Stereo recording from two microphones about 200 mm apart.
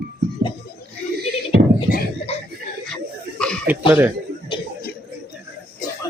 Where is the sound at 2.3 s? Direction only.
30° left (ahead or behind).